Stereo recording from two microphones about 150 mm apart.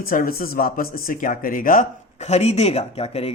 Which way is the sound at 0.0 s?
75° left (ahead or behind).